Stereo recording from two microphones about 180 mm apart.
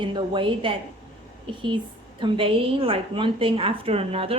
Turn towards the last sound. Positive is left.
turn(degrees=-35)  # may be behind; listen again after turning